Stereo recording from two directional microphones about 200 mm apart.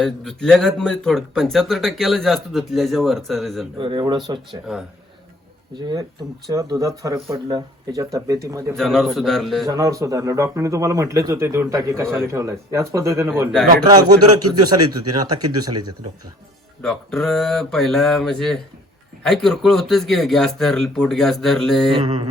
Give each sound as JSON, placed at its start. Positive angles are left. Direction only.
{"t": 0.0, "sound": "speech", "side_deg": 5}
{"t": 3.8, "sound": "a man's voice", "side_deg": -25}
{"t": 5.7, "sound": "a man's voice", "side_deg": -20}
{"t": 8.7, "sound": "speech", "side_deg": 0}
{"t": 9.6, "sound": "a man's voice", "side_deg": -15}
{"t": 16.8, "sound": "speech", "side_deg": 0}